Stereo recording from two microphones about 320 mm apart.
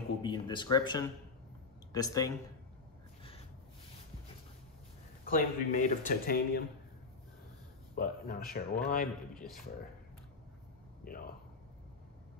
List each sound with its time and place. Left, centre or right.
0.2 s speech: centre
5.2 s speech: left
7.9 s speech: left
11.1 s speech: left